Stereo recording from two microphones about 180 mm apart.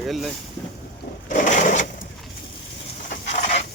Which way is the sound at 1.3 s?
45° left (ahead or behind).